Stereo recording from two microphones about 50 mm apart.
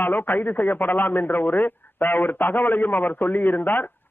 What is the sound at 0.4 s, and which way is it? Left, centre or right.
A man's voice, left.